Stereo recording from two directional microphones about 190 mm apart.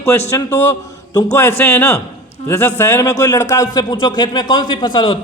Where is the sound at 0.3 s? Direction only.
15° left (ahead or behind).